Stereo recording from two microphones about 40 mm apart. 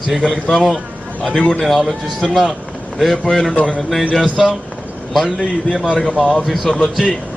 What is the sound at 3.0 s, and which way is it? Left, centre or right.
Speech, centre.